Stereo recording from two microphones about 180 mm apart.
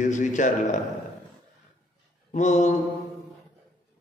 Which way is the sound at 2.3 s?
40° left (ahead or behind).